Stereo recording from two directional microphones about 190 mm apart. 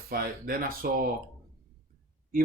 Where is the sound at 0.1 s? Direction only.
50° right (ahead or behind).